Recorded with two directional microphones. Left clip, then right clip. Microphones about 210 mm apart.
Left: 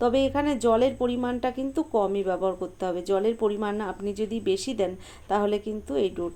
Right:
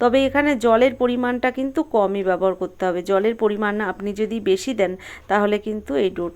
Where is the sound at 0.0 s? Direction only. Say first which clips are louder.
Right 6 dB; 20° right (ahead or behind).